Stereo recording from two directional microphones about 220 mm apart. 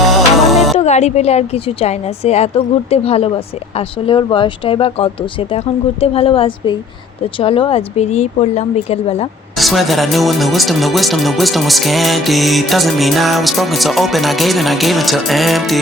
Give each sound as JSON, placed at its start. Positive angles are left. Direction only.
{"t": 0.1, "sound": "music", "side_deg": 0}
{"t": 0.8, "sound": "a woman's voice", "side_deg": 30}
{"t": 9.6, "sound": "speech", "side_deg": 0}